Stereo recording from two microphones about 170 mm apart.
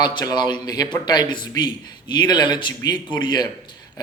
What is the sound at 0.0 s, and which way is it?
Speech, 25° left (ahead or behind).